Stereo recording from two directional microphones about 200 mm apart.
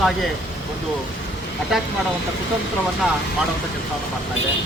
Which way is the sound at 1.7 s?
Centre (ahead or behind).